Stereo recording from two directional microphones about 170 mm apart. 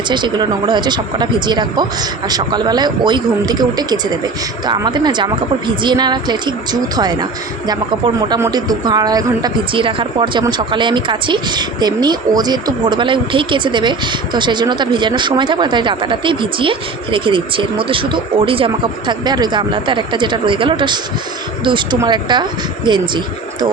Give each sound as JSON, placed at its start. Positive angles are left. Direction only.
{"t": 0.1, "sound": "speech", "side_deg": -25}